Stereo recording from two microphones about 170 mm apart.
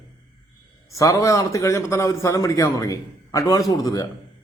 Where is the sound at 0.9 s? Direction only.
20° left (ahead or behind).